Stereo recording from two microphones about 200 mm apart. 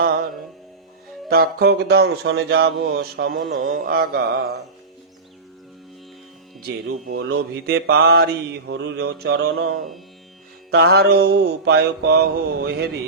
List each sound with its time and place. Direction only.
0.0 s music: 45° right (ahead or behind)
1.3 s speech: 50° right (ahead or behind)
7.3 s mantra: 50° right (ahead or behind)
10.7 s speech: 55° right (ahead or behind)